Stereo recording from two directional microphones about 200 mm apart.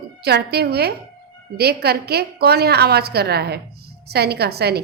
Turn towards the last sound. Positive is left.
turn(degrees=-55)  # may be behind; listen again after turning